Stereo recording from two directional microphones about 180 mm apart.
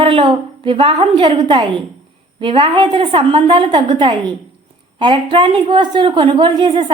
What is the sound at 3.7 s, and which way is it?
Speech, 40° right (ahead or behind).